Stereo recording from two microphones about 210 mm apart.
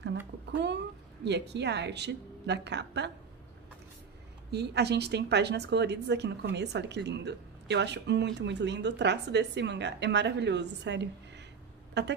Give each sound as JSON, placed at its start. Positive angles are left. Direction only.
{"t": 0.5, "sound": "a woman's voice", "side_deg": -55}
{"t": 4.5, "sound": "a woman's voice", "side_deg": -50}